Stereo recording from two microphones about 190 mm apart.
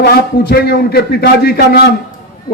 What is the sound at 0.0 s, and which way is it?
A man's voice, 55° left (ahead or behind).